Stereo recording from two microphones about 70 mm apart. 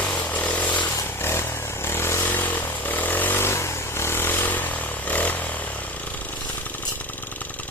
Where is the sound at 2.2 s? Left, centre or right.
Left.